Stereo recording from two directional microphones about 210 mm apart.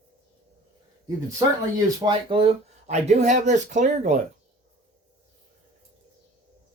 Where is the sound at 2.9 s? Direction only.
35° right (ahead or behind).